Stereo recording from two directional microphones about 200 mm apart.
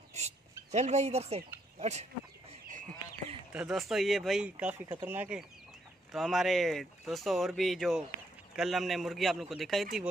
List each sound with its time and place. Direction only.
0.1 s a sound: 35° right (ahead or behind)
1.8 s speech: 35° right (ahead or behind)
3.5 s speech: centre (ahead or behind)